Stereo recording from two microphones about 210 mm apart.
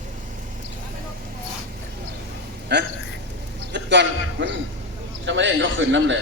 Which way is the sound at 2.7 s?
50° right (ahead or behind).